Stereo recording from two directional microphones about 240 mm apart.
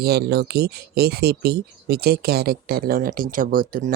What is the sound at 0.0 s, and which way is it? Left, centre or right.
Speech, right.